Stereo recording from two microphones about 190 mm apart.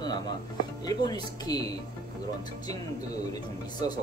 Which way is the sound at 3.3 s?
20° left (ahead or behind).